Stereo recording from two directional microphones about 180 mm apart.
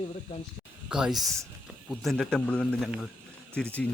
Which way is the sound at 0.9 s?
5° right (ahead or behind).